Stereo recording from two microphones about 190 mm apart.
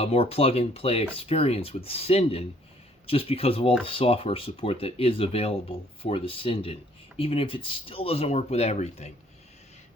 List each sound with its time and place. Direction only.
0.0 s speech: 30° left (ahead or behind)